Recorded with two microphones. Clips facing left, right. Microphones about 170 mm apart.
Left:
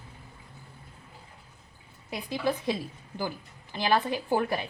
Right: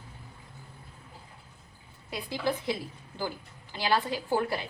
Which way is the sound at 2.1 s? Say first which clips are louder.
Left 2 dB; 15° left (ahead or behind).